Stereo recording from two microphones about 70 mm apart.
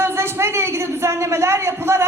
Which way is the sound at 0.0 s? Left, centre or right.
Right.